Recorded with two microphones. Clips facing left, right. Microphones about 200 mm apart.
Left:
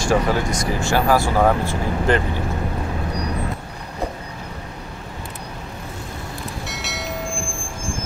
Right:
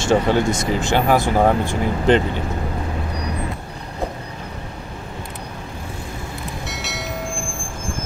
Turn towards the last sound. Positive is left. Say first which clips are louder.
# even
turn(degrees=0)  # may be behind; listen again after turning